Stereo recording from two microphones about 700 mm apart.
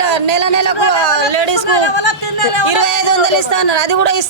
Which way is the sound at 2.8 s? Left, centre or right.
Right.